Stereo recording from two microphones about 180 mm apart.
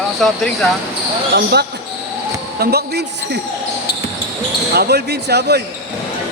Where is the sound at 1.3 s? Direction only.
65° right (ahead or behind).